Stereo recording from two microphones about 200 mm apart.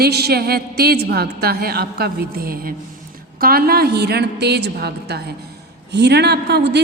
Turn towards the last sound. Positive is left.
turn(degrees=-60)  # may be behind; listen again after turning